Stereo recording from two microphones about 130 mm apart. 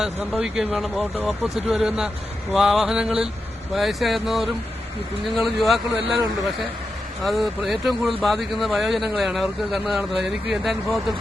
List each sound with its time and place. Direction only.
0.0 s speech: 5° right (ahead or behind)
7.3 s speech: centre (ahead or behind)